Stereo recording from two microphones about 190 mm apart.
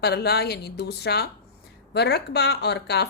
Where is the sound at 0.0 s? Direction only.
60° left (ahead or behind).